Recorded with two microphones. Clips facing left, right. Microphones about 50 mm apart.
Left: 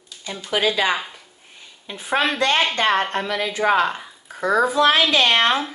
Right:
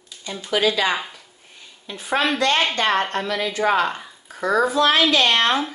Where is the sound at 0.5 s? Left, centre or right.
Left.